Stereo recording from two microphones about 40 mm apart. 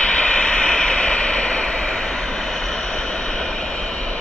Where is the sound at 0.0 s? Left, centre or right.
Left.